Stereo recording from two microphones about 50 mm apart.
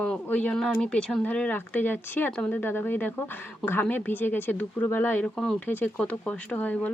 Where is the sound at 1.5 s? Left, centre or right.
Left.